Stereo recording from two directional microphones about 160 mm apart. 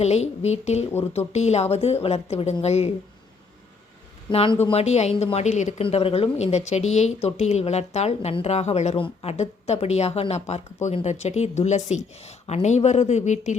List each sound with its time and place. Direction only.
0.0 s a woman's voice: 40° left (ahead or behind)
4.3 s a woman's voice: 35° left (ahead or behind)
5.8 s a woman's voice: 35° left (ahead or behind)